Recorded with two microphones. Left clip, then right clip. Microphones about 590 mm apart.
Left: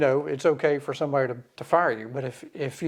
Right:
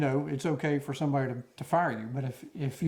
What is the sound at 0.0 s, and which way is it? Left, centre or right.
Speech, left.